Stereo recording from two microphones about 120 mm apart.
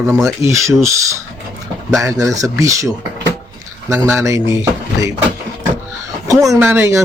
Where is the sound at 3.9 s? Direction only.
25° right (ahead or behind).